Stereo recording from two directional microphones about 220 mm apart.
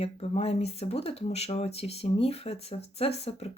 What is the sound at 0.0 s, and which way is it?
Speech, 25° left (ahead or behind).